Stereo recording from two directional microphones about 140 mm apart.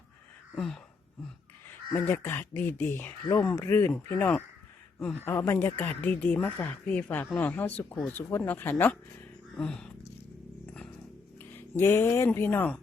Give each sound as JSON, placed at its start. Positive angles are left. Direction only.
{"t": 0.5, "sound": "speech", "side_deg": 5}
{"t": 1.9, "sound": "speech", "side_deg": 15}
{"t": 11.3, "sound": "speech", "side_deg": 15}